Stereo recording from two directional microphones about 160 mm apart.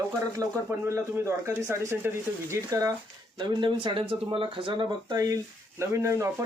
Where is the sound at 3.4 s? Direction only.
30° right (ahead or behind).